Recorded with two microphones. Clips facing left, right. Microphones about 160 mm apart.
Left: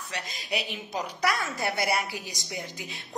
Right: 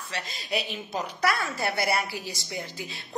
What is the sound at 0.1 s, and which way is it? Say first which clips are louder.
A woman's voice: right 2 dB; 15° left (ahead or behind).